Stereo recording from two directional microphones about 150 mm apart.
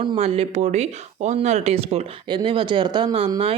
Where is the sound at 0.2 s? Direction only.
45° right (ahead or behind).